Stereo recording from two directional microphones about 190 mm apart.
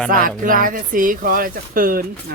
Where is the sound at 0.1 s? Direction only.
45° right (ahead or behind).